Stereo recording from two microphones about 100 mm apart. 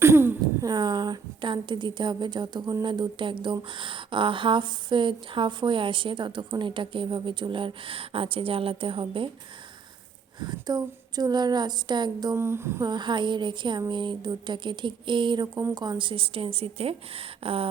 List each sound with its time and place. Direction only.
0.0 s a sound: 25° right (ahead or behind)
0.6 s speech: 45° right (ahead or behind); by 9.3 s 60° right (ahead or behind)
10.4 s speech: 40° right (ahead or behind)
12.3 s speech: 25° right (ahead or behind)
12.8 s a woman's voice: 50° right (ahead or behind); by 17.7 s 70° right (ahead or behind)